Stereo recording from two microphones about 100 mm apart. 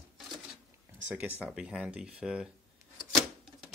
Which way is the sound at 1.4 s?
10° right (ahead or behind).